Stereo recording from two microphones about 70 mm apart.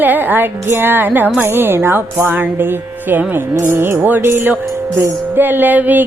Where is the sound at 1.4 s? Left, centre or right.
Right.